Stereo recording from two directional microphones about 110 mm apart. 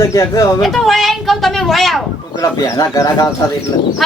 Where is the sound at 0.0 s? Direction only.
30° left (ahead or behind).